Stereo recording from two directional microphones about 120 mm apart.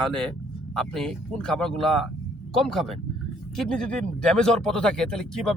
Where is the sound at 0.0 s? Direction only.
5° left (ahead or behind).